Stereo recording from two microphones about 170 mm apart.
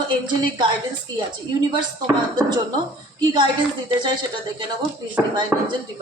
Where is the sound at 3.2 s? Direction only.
25° right (ahead or behind).